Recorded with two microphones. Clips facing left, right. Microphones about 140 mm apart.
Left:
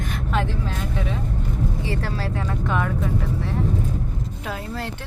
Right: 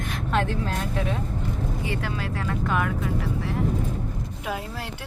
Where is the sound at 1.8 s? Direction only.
35° left (ahead or behind).